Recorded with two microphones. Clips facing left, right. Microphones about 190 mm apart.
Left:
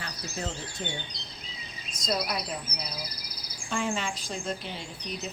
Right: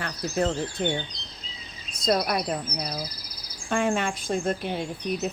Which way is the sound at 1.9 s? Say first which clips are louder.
Right 6 dB; 55° right (ahead or behind).